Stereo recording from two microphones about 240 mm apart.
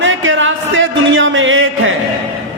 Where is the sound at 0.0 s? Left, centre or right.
Right.